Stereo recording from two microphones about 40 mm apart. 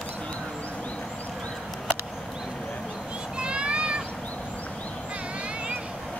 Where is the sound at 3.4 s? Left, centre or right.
Right.